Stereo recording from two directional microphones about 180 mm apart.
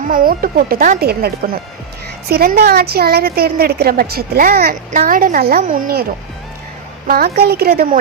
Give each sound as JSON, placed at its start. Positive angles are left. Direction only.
{"t": 0.0, "sound": "speech", "side_deg": -50}
{"t": 2.3, "sound": "a woman's voice", "side_deg": -60}
{"t": 7.3, "sound": "a woman's voice", "side_deg": -60}